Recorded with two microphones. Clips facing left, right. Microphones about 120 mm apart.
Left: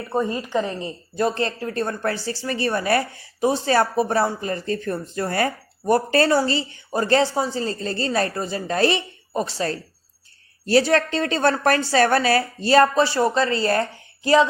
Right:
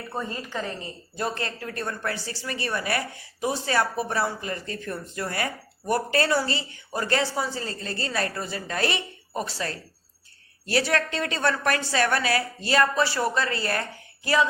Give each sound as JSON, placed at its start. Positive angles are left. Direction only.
{"t": 0.1, "sound": "a woman's voice", "side_deg": 20}